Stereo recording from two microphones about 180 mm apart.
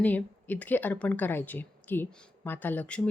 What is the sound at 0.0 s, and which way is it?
Speech, 10° left (ahead or behind).